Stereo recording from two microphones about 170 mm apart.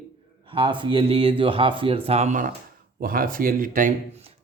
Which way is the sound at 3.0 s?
55° right (ahead or behind).